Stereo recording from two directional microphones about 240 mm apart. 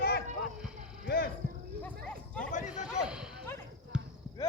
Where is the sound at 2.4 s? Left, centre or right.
Left.